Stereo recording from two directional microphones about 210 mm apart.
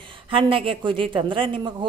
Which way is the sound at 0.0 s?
25° right (ahead or behind).